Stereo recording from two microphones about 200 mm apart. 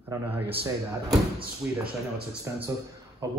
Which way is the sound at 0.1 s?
15° right (ahead or behind).